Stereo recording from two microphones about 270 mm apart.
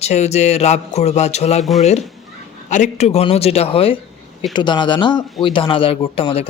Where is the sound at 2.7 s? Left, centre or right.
Left.